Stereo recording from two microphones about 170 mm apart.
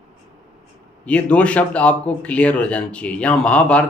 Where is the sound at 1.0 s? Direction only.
5° left (ahead or behind).